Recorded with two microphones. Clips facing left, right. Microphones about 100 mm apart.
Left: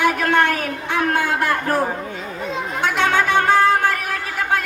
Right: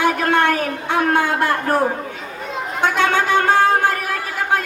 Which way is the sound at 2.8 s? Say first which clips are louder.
Right 1 dB; 40° right (ahead or behind).